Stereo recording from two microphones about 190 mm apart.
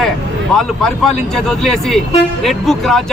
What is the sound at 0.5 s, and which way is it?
Speech, centre (ahead or behind).